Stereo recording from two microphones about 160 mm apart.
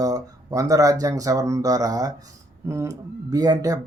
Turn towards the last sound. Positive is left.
turn(degrees=-20)  # may be behind; listen again after turning